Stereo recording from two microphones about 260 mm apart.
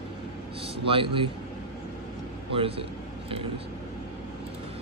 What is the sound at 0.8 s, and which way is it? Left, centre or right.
Speech, centre.